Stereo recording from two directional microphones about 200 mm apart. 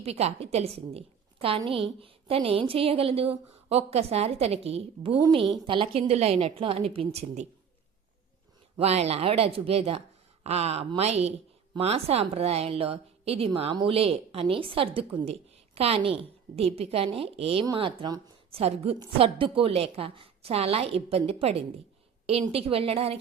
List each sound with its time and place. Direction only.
0.0 s a woman's voice: 30° right (ahead or behind)
5.1 s a woman's voice: 20° right (ahead or behind)
8.8 s a woman's voice: 30° right (ahead or behind)